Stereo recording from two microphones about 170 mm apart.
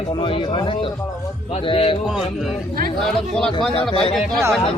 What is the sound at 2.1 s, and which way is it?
Speech, 5° right (ahead or behind).